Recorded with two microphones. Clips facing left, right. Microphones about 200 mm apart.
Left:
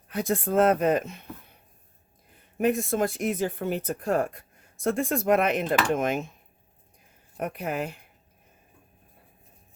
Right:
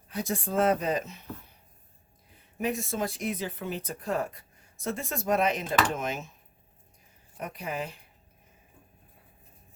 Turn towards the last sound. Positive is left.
turn(degrees=60)  # may be behind; listen again after turning